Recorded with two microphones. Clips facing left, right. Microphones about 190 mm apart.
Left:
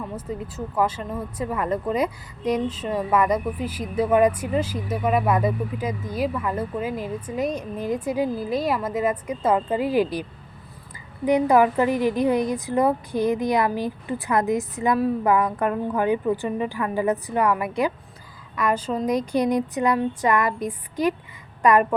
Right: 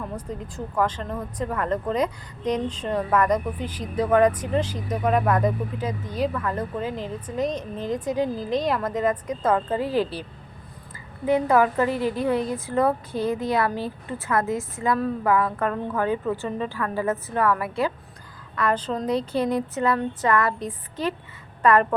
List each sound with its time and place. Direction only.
0.2 s speech: 5° left (ahead or behind)
11.3 s speech: 15° left (ahead or behind)